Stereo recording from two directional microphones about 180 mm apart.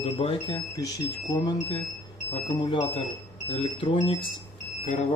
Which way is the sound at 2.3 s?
30° left (ahead or behind).